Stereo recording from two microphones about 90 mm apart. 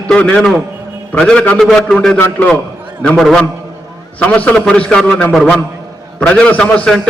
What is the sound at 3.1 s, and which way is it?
Speech, 5° left (ahead or behind).